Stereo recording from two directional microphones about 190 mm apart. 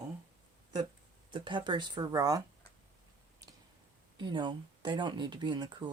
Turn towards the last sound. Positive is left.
turn(degrees=-20)  # may be behind; listen again after turning